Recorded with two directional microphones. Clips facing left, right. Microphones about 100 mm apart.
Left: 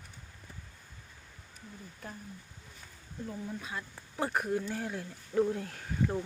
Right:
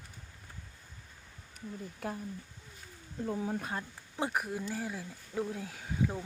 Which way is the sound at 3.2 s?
75° right (ahead or behind).